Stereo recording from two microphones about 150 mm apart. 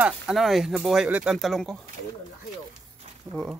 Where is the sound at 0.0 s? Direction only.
Centre (ahead or behind).